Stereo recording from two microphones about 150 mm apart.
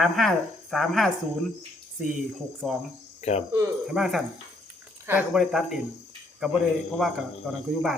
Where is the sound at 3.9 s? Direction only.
5° right (ahead or behind).